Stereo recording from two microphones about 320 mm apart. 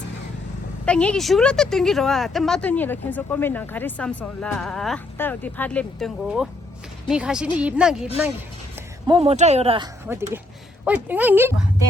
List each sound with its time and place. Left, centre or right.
0.9 s speech: centre
9.0 s speech: centre